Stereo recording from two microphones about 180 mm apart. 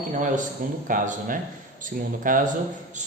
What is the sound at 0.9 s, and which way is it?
A man's voice, 45° right (ahead or behind).